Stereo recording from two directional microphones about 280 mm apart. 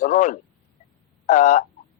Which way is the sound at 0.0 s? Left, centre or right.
Left.